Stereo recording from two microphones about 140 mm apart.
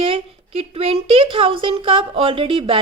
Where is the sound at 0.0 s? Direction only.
40° right (ahead or behind).